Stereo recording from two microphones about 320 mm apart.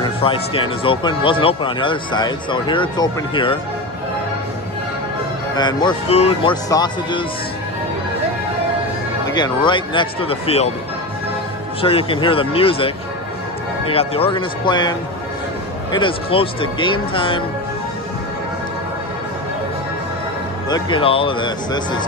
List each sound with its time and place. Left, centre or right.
0.0 s speech: centre
5.6 s speech: centre
9.3 s speech: centre
11.8 s speech: centre
20.7 s speech: centre